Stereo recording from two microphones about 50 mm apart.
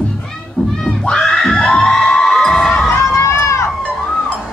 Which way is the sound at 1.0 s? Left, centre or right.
Centre.